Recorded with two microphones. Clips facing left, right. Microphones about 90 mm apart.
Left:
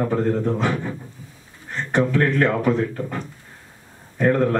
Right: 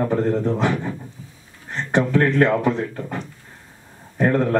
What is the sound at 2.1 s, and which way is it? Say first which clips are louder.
Speech: right 5 dB; 25° right (ahead or behind).